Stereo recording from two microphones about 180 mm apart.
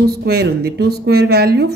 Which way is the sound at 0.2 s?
60° right (ahead or behind).